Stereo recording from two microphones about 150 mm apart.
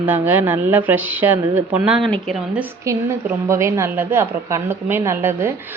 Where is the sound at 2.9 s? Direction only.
20° right (ahead or behind).